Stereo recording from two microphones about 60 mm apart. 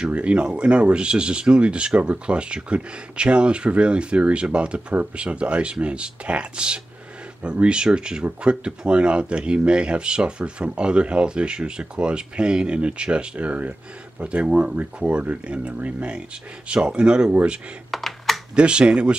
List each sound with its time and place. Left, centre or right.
0.0 s speech: centre
17.9 s computer keyboard: centre
18.5 s speech: centre